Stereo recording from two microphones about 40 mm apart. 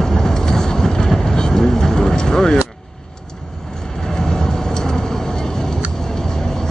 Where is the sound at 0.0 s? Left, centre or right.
Centre.